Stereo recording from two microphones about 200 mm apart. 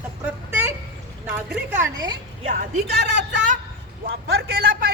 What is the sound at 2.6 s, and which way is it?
Speech, 55° right (ahead or behind).